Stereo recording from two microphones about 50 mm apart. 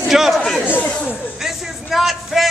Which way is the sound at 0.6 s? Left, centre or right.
Left.